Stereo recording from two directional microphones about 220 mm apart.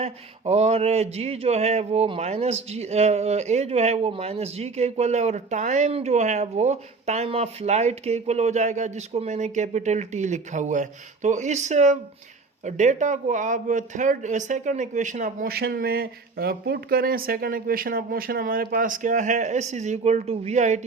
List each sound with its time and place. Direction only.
0.0 s speech: 30° right (ahead or behind)